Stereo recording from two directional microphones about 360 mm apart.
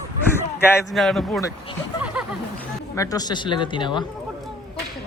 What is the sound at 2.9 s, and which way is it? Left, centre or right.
Speech, centre.